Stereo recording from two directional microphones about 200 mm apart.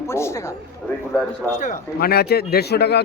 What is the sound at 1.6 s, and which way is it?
Speech, 45° left (ahead or behind).